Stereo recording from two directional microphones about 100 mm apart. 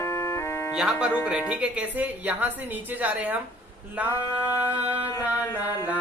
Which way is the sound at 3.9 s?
15° right (ahead or behind).